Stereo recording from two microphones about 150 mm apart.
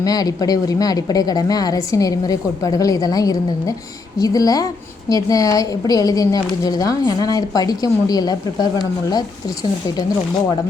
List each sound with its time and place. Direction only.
0.0 s a woman's voice: 25° left (ahead or behind)